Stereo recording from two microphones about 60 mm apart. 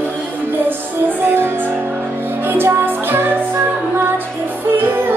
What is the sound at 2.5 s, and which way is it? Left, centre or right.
Music, right.